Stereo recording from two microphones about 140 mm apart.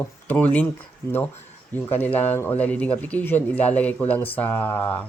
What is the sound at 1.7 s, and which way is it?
Speech, 15° left (ahead or behind).